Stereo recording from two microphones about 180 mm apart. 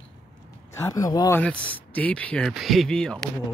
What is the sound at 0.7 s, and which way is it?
Speech, 15° left (ahead or behind).